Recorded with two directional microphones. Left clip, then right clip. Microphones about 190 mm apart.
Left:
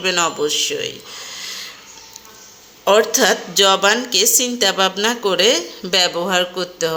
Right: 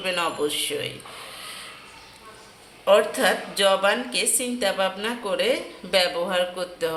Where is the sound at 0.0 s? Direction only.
25° left (ahead or behind).